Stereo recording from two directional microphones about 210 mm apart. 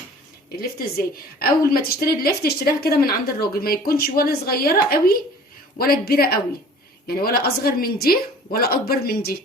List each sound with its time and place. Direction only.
0.5 s a woman's voice: 45° left (ahead or behind)